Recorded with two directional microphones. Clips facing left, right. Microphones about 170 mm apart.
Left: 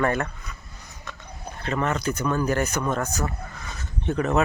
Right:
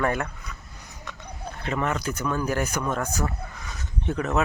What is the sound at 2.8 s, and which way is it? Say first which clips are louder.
Speech: left 2 dB; centre (ahead or behind).